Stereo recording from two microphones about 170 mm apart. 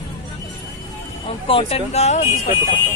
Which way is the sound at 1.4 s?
35° left (ahead or behind).